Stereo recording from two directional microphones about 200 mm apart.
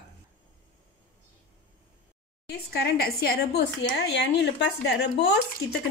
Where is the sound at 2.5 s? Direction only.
55° left (ahead or behind).